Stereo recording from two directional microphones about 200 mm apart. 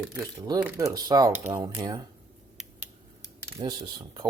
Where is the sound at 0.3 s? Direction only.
20° right (ahead or behind).